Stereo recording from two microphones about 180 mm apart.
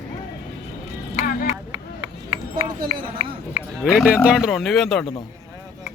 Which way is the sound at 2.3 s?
30° right (ahead or behind).